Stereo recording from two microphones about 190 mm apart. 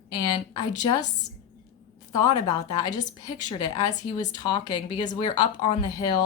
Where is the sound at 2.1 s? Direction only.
20° left (ahead or behind).